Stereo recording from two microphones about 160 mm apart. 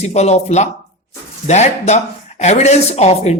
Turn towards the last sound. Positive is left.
turn(degrees=45)  # may be behind; listen again after turning